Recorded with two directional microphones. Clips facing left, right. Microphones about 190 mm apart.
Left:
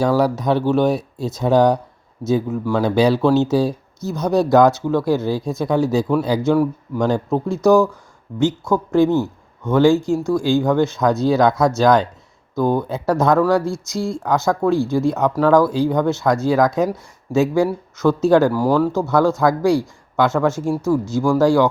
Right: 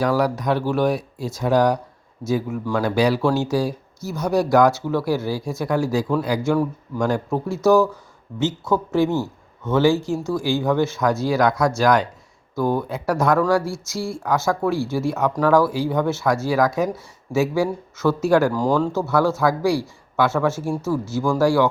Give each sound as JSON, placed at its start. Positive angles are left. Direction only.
{"t": 0.0, "sound": "speech", "side_deg": 25}